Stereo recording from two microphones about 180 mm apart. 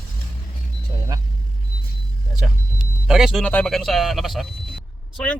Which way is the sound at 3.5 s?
5° left (ahead or behind).